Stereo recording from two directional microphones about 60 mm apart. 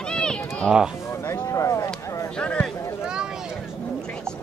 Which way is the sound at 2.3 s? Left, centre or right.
Centre.